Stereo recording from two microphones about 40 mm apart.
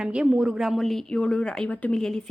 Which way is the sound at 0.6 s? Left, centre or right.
Centre.